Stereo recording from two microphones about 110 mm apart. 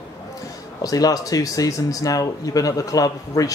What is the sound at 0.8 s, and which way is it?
Speech, 35° left (ahead or behind).